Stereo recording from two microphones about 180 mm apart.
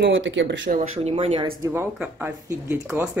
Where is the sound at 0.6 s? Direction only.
40° right (ahead or behind).